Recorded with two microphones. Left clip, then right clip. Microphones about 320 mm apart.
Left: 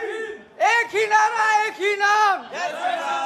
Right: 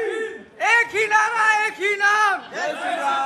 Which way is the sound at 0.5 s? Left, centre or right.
Left.